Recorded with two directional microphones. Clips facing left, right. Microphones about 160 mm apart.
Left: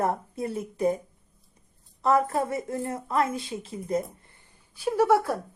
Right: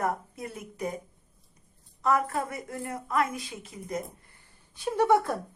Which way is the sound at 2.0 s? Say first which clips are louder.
Left 4 dB; 30° left (ahead or behind).